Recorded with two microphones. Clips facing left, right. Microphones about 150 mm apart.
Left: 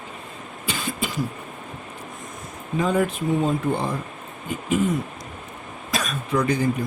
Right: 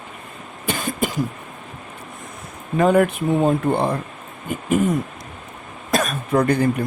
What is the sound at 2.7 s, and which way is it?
Speech, 60° right (ahead or behind).